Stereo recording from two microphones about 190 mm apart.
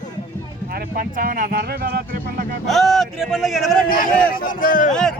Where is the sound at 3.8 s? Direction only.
50° left (ahead or behind).